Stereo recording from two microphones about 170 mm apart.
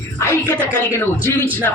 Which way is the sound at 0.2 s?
15° left (ahead or behind).